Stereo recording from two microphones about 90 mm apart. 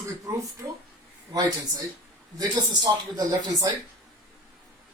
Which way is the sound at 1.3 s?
45° right (ahead or behind).